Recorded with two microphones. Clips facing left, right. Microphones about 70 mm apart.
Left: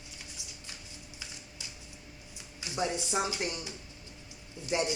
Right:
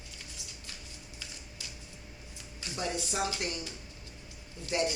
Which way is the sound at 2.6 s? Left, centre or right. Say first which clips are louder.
Left 2 dB; left.